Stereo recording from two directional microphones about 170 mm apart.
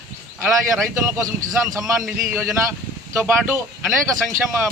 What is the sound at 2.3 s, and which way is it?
Speech, 15° right (ahead or behind).